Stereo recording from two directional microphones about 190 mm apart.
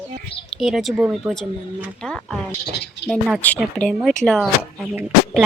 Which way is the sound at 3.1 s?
5° right (ahead or behind).